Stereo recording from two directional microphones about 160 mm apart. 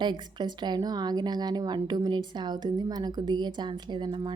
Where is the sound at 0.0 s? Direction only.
30° right (ahead or behind).